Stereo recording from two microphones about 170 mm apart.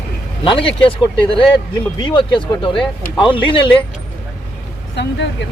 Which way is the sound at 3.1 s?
30° left (ahead or behind).